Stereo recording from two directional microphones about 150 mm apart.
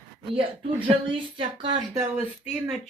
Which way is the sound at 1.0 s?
35° right (ahead or behind).